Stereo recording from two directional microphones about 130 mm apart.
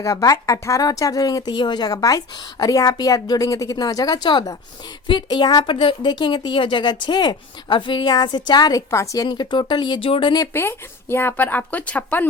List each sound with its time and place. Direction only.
0.0 s a woman's voice: 25° left (ahead or behind)
10.5 s speech: 20° left (ahead or behind)